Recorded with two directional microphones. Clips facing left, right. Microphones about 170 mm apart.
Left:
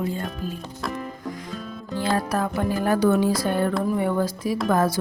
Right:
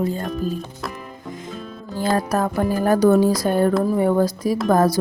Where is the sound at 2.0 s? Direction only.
45° right (ahead or behind).